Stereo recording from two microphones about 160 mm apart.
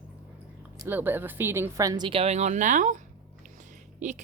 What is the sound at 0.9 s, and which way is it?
A woman's voice, 10° right (ahead or behind).